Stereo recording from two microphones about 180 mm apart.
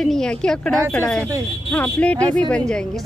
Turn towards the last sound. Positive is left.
turn(degrees=5)  # may be behind; listen again after turning